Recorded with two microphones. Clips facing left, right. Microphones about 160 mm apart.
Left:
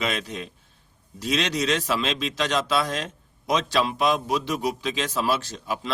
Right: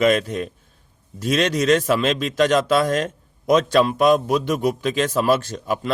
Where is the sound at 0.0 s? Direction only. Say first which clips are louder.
Right 11 dB; 50° right (ahead or behind).